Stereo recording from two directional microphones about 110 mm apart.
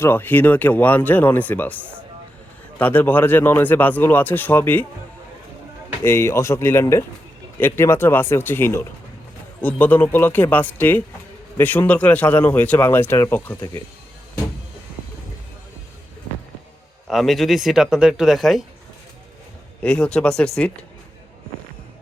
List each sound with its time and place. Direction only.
0.0 s a man's voice: 20° left (ahead or behind)
6.0 s a man's voice: 20° left (ahead or behind)
17.1 s speech: centre (ahead or behind)
19.8 s a man's voice: 10° left (ahead or behind)